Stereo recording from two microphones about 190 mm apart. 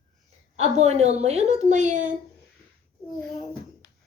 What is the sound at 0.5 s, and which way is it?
A woman's voice, 35° right (ahead or behind).